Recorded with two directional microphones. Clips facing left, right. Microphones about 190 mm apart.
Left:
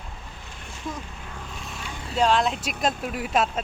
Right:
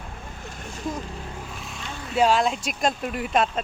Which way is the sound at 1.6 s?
5° right (ahead or behind).